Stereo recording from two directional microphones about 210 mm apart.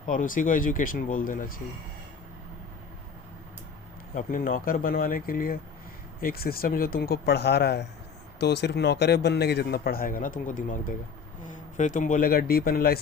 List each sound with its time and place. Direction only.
0.1 s speech: 40° left (ahead or behind)
4.1 s a man's voice: 40° left (ahead or behind)